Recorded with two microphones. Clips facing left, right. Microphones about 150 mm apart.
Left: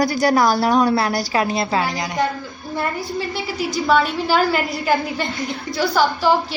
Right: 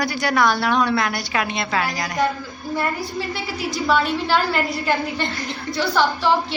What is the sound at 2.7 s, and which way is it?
A woman's voice, centre (ahead or behind).